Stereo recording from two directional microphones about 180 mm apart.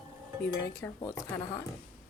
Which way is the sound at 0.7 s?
15° left (ahead or behind).